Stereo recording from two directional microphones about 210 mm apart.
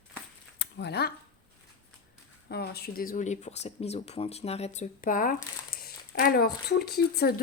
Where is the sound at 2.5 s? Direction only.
50° left (ahead or behind).